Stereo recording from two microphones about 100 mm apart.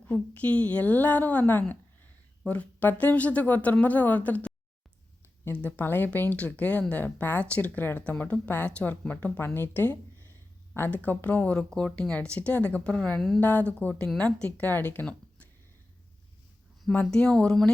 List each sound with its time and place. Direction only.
0.0 s speech: 15° left (ahead or behind)
13.4 s speech: 15° left (ahead or behind)
16.9 s speech: 15° left (ahead or behind)